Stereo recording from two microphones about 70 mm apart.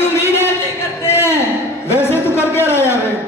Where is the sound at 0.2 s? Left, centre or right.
Left.